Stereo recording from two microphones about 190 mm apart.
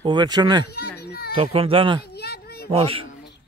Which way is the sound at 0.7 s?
55° left (ahead or behind).